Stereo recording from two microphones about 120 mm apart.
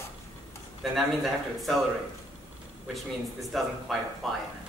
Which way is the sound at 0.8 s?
Centre (ahead or behind).